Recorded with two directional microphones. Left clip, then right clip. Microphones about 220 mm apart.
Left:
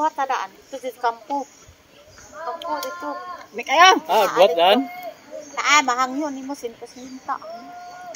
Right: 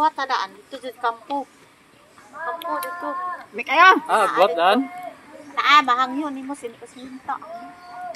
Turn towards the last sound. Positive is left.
turn(degrees=-15)  # may be behind; listen again after turning